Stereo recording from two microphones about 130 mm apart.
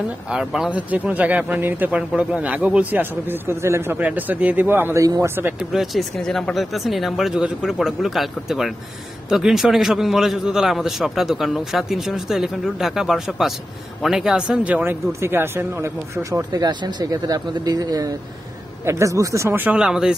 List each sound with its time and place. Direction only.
0.3 s a man's voice: 5° right (ahead or behind)
5.7 s a man's voice: centre (ahead or behind)